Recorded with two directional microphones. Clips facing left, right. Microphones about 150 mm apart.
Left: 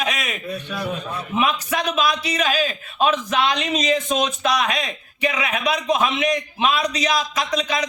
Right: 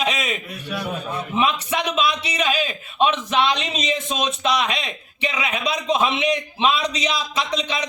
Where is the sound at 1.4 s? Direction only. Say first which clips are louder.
Even; 25° right (ahead or behind).